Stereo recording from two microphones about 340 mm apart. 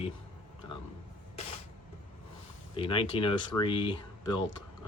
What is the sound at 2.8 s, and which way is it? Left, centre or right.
Speech, centre.